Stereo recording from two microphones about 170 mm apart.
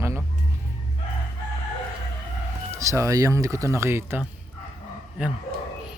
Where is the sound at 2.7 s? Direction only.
15° right (ahead or behind).